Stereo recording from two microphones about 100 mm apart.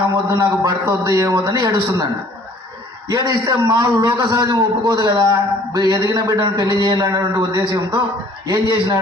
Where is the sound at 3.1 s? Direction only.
40° right (ahead or behind).